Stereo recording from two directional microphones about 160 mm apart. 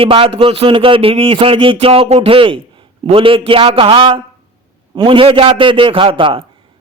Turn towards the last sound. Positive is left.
turn(degrees=-35)  # may be behind; listen again after turning